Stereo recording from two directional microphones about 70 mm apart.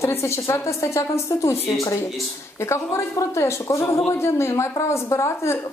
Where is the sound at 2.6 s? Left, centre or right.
Left.